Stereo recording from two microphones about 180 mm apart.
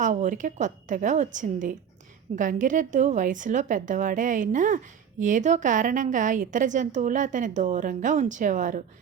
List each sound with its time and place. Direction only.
0.0 s a woman's voice: 45° right (ahead or behind)